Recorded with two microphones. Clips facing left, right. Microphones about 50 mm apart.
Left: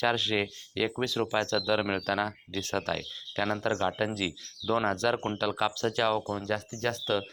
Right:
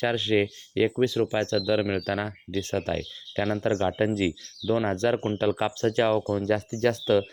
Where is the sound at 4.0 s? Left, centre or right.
Right.